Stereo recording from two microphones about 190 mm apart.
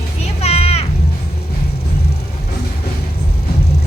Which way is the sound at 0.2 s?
30° left (ahead or behind).